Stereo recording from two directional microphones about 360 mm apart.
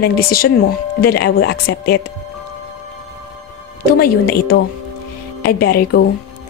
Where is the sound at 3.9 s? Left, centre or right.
Left.